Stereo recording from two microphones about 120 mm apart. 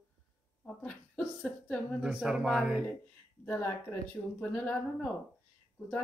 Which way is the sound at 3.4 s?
15° left (ahead or behind).